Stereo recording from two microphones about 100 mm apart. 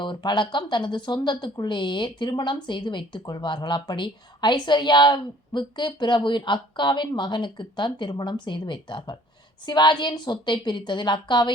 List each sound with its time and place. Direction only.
0.0 s speech: 50° left (ahead or behind)